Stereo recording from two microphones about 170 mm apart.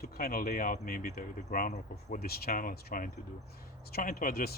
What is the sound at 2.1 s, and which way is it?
Speech, 65° left (ahead or behind).